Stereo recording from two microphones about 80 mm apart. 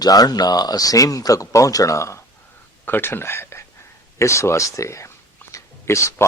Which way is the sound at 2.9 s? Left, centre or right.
Left.